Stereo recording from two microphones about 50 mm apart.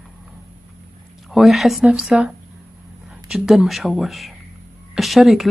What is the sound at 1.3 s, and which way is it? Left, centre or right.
Speech, centre.